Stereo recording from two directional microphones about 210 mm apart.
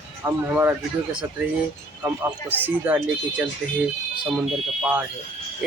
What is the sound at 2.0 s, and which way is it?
Speech, 5° right (ahead or behind).